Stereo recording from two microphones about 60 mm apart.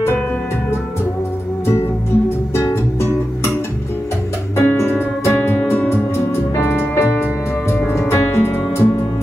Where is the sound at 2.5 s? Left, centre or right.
Left.